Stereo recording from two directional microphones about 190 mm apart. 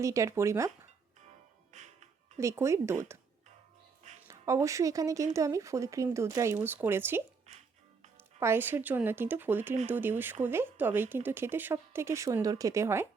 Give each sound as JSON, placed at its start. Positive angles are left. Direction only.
{"t": 0.0, "sound": "speech", "side_deg": -15}
{"t": 1.7, "sound": "music", "side_deg": -40}
{"t": 2.4, "sound": "speech", "side_deg": -15}
{"t": 3.1, "sound": "music", "side_deg": -15}
{"t": 4.3, "sound": "speech", "side_deg": -15}
{"t": 8.4, "sound": "speech", "side_deg": -10}